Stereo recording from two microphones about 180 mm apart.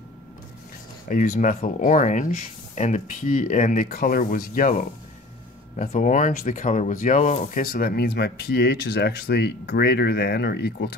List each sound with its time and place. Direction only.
1.0 s speech: 45° left (ahead or behind); by 11.0 s 70° left (ahead or behind)